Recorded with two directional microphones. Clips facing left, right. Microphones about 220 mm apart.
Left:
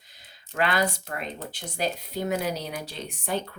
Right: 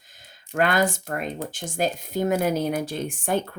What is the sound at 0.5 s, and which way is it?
Speech, 45° right (ahead or behind).